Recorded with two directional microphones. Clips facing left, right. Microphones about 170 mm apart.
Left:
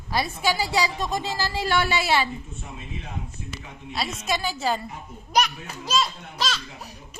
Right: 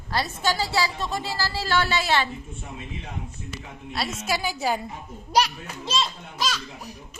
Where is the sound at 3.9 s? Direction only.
5° right (ahead or behind).